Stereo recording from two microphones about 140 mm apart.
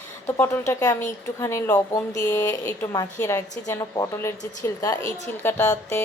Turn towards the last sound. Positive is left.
turn(degrees=20)  # may be behind; listen again after turning